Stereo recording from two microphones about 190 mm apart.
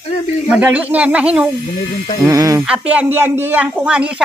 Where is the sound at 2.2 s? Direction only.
15° right (ahead or behind).